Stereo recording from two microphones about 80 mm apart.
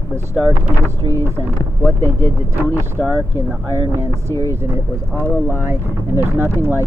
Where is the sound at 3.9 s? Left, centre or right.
Right.